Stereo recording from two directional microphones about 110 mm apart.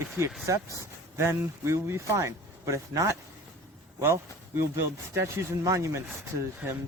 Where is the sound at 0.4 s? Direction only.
30° right (ahead or behind).